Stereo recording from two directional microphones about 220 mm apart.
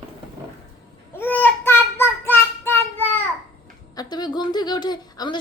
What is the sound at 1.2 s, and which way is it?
Child singing, 10° left (ahead or behind).